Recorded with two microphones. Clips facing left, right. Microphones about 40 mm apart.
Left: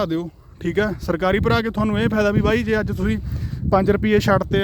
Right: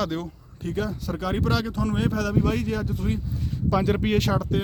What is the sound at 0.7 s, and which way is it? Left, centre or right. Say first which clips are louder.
Speech: left 8 dB; left.